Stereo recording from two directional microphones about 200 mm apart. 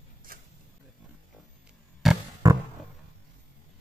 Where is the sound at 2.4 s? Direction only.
15° right (ahead or behind).